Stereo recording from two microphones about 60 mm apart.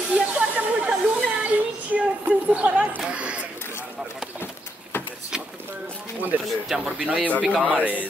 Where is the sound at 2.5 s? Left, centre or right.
Right.